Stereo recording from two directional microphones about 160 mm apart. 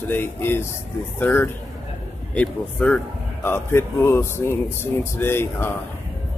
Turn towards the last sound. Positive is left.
turn(degrees=15)  # may be behind; listen again after turning